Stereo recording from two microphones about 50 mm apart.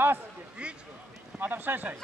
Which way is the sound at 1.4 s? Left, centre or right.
Right.